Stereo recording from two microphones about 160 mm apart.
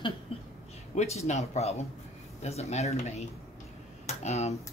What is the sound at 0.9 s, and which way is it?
Speech, 45° left (ahead or behind).